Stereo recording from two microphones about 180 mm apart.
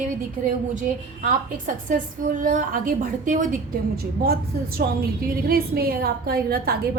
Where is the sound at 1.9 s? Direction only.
50° right (ahead or behind).